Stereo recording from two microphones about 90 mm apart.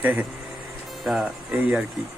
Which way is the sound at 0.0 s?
20° right (ahead or behind).